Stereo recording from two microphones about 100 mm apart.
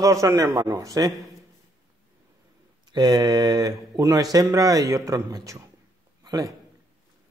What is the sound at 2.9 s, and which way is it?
A man's voice, 45° right (ahead or behind).